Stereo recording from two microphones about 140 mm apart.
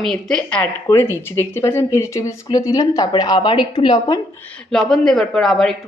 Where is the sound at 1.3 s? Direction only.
20° left (ahead or behind).